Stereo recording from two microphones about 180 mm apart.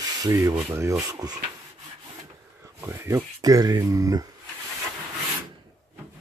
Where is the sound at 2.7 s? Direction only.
15° right (ahead or behind).